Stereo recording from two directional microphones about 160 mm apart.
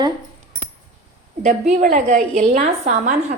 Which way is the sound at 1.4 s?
55° right (ahead or behind).